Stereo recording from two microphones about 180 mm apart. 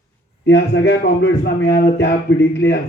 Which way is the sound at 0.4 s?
70° left (ahead or behind).